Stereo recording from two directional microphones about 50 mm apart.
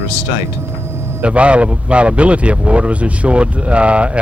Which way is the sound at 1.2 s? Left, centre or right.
Right.